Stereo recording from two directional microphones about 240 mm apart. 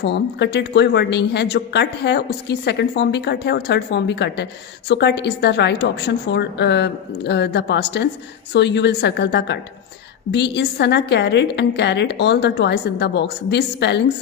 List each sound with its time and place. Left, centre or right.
0.0 s a woman's voice: left